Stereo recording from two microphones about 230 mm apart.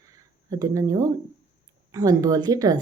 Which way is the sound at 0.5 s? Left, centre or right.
Centre.